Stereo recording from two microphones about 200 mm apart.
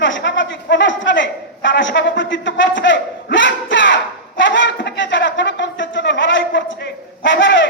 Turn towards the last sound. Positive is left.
turn(degrees=65)  # may be behind; listen again after turning